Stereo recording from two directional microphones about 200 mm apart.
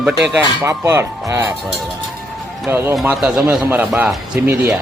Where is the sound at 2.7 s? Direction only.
10° right (ahead or behind).